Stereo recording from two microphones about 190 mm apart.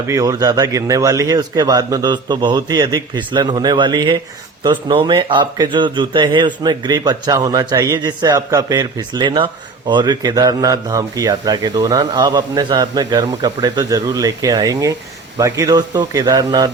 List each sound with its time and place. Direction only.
0.1 s a man's voice: 20° right (ahead or behind)